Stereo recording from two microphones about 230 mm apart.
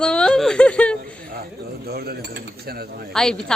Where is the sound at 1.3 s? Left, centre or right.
Right.